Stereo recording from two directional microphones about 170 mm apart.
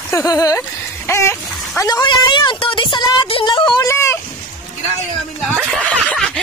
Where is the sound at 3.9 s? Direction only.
15° left (ahead or behind).